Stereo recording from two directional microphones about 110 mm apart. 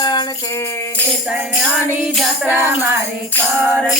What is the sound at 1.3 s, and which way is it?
Music, 10° right (ahead or behind).